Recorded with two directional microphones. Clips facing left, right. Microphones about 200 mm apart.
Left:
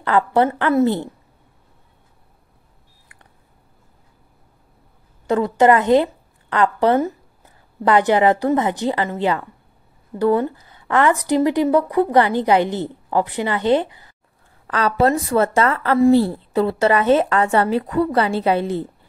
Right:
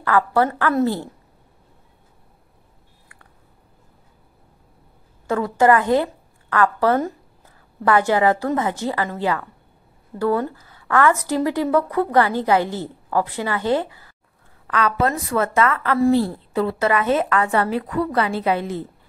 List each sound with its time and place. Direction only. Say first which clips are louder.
0.0 s a woman's voice: left 2 dB; 20° left (ahead or behind)
5.2 s a woman's voice: left 2 dB; 20° left (ahead or behind)
14.7 s a woman's voice: left 3 dB; 35° left (ahead or behind)